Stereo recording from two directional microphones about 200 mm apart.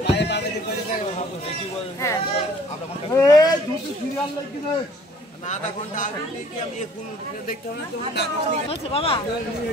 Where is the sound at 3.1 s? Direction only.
15° left (ahead or behind).